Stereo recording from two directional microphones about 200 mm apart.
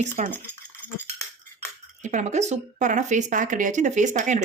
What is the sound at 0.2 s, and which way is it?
Speech, 40° right (ahead or behind).